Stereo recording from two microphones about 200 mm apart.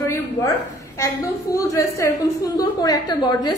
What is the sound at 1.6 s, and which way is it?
A woman's voice, 15° left (ahead or behind).